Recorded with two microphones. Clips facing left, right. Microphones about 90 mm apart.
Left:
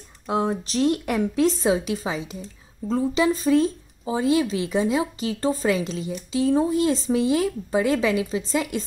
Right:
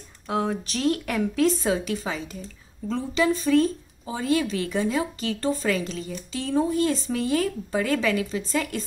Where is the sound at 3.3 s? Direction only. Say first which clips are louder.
Left 1 dB; 30° left (ahead or behind).